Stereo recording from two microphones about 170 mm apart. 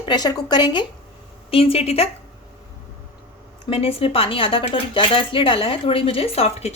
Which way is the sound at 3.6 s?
35° left (ahead or behind).